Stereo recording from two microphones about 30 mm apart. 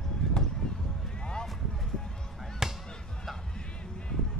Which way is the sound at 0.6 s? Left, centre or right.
Left.